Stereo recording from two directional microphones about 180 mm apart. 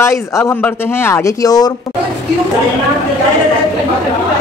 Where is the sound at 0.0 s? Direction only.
15° left (ahead or behind).